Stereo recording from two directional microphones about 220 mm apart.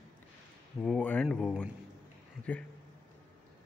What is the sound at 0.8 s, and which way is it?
Speech, 5° left (ahead or behind).